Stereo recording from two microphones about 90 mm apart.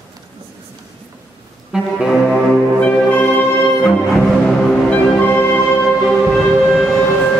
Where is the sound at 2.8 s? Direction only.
20° left (ahead or behind).